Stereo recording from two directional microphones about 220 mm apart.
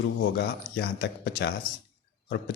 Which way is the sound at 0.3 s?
45° left (ahead or behind).